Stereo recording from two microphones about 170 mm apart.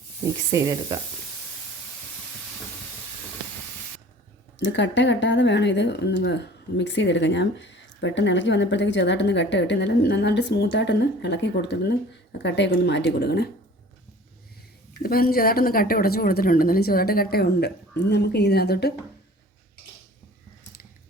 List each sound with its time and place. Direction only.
0.5 s speech: 20° right (ahead or behind)
4.5 s speech: 90° left; by 13.5 s 70° left (ahead or behind)
15.0 s a woman's voice: 60° left (ahead or behind)